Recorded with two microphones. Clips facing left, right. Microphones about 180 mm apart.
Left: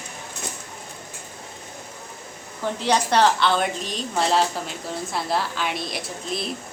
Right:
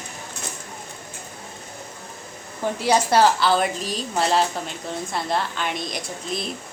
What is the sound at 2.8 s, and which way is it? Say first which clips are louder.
A woman's voice: right 2 dB; 10° right (ahead or behind).